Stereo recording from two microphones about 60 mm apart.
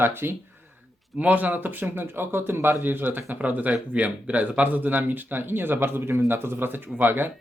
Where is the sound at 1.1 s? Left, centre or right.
Right.